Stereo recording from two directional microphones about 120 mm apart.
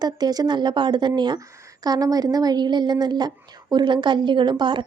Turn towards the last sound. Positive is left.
turn(degrees=-40)  # may be behind; listen again after turning